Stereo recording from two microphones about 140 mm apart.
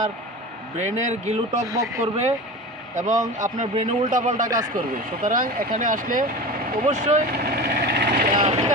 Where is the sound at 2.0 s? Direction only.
50° right (ahead or behind).